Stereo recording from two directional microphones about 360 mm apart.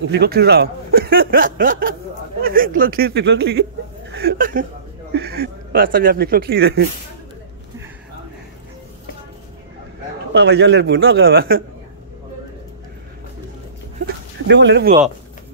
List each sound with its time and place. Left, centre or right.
0.0 s speech: right
4.1 s chuckle: right
5.1 s speech: right
10.3 s speech: right
13.9 s a sound: right